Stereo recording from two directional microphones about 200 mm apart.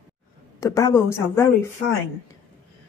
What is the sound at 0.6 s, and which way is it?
Speech, 15° left (ahead or behind).